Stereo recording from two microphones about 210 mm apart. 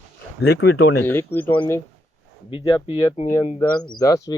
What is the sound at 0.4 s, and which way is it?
Speech, 50° left (ahead or behind).